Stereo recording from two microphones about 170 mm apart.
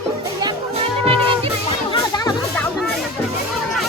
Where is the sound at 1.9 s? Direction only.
20° left (ahead or behind).